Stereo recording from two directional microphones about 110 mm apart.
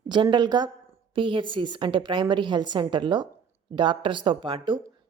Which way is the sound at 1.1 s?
50° right (ahead or behind).